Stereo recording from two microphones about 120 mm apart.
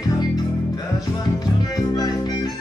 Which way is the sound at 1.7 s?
30° left (ahead or behind).